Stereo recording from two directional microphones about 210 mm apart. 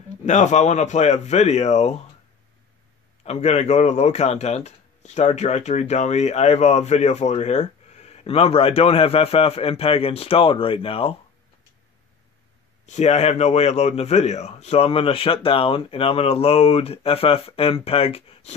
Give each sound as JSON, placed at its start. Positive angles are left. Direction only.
{"t": 0.2, "sound": "speech", "side_deg": 35}
{"t": 3.3, "sound": "speech", "side_deg": 30}
{"t": 12.8, "sound": "a man's voice", "side_deg": 35}